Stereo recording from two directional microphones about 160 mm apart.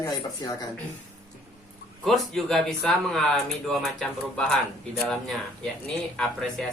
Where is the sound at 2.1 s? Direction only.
Centre (ahead or behind).